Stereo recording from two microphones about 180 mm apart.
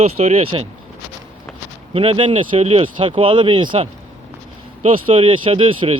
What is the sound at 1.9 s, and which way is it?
A man's voice, 35° right (ahead or behind).